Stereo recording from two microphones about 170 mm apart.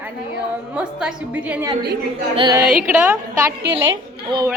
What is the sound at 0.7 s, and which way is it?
Speech, 5° right (ahead or behind).